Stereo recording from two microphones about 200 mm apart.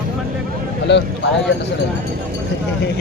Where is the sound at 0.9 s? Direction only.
60° left (ahead or behind).